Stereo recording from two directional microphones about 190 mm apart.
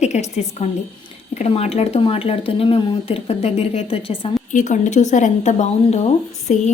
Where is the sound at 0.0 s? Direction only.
35° left (ahead or behind).